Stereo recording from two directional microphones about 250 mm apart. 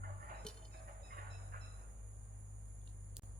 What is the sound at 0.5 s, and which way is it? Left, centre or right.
Music, centre.